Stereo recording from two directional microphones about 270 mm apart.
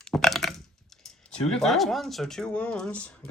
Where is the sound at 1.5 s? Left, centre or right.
Centre.